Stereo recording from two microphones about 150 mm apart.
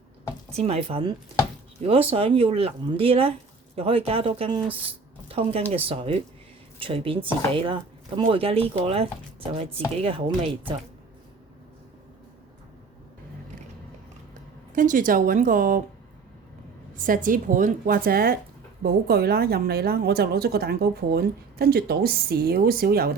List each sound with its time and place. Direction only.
0.5 s speech: 45° right (ahead or behind)
14.8 s speech: 65° right (ahead or behind)
17.2 s a woman's voice: 65° right (ahead or behind); by 23.1 s 90° right